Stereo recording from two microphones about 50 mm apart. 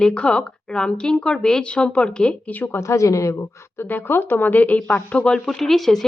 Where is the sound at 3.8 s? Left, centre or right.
Left.